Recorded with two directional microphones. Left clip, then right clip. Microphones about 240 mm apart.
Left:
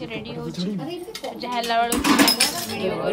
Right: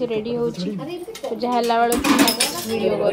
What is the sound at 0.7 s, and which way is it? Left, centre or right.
Speech, centre.